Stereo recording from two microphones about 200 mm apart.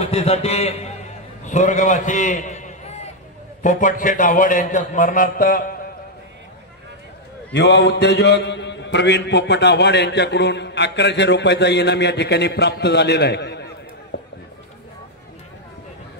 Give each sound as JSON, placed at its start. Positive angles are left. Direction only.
{"t": 0.0, "sound": "a man's voice", "side_deg": 30}
{"t": 7.5, "sound": "a man's voice", "side_deg": 60}
{"t": 14.1, "sound": "a sound", "side_deg": 60}